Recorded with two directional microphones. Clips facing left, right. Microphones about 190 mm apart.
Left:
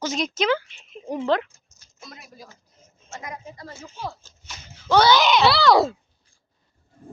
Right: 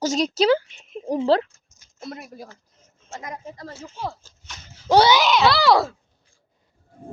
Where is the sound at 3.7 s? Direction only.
10° right (ahead or behind).